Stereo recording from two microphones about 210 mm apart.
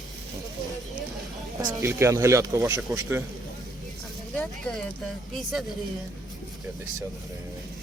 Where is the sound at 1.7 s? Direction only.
15° right (ahead or behind).